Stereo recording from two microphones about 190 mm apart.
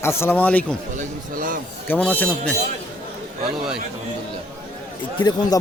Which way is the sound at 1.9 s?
10° left (ahead or behind).